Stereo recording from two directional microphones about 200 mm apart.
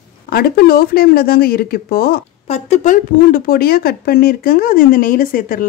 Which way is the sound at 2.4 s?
35° left (ahead or behind).